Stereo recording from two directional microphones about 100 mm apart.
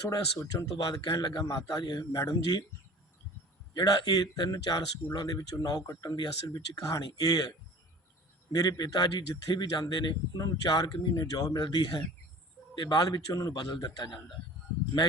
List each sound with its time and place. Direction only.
0.1 s a man's voice: 35° left (ahead or behind)
3.8 s a man's voice: 40° left (ahead or behind)
8.5 s speech: 40° left (ahead or behind)